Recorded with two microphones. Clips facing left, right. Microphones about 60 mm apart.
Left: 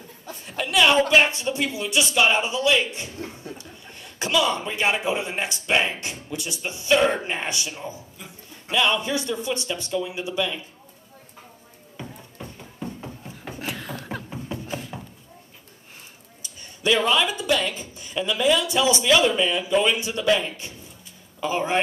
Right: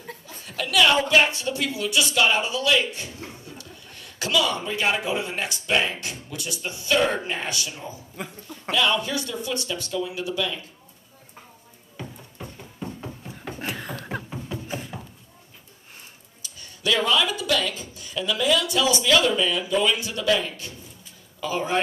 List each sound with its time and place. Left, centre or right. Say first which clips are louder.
0.3 s a man's voice: left 1 dB; left
12.0 s music: even; centre
13.4 s beatboxing: right 1 dB; centre
14.7 s music: left 1 dB; centre
16.8 s speech: left 2 dB; left